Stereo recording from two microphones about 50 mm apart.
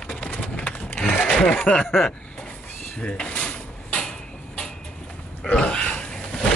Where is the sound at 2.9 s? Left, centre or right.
Left.